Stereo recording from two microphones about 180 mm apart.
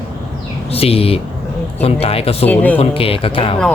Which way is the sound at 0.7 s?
35° left (ahead or behind).